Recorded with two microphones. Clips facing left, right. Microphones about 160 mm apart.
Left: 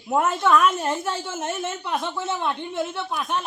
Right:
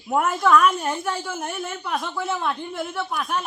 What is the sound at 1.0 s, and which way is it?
A woman's voice, 25° left (ahead or behind).